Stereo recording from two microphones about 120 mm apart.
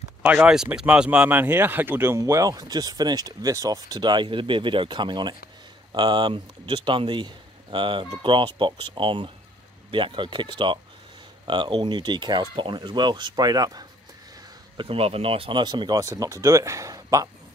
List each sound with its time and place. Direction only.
0.2 s speech: 10° right (ahead or behind); by 13.8 s 30° right (ahead or behind)
14.8 s speech: 55° right (ahead or behind); by 17.3 s 30° right (ahead or behind)